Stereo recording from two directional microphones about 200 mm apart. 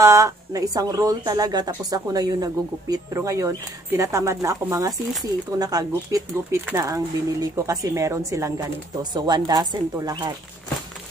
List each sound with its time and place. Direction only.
0.0 s speech: 15° right (ahead or behind)